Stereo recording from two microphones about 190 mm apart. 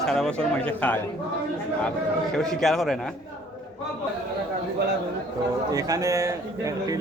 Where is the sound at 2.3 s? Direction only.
5° left (ahead or behind).